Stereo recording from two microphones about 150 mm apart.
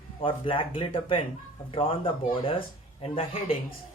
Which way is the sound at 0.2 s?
35° left (ahead or behind).